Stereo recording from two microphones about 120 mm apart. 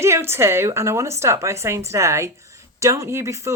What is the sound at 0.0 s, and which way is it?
A woman's voice, 20° right (ahead or behind).